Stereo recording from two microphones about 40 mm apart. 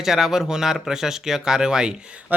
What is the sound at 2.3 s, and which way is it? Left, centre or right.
Speech, right.